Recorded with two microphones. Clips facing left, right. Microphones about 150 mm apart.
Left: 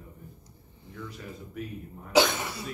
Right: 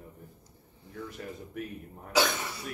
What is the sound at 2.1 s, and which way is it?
Speech, 20° left (ahead or behind).